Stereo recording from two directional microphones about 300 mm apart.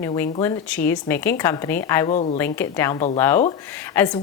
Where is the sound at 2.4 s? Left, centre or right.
Centre.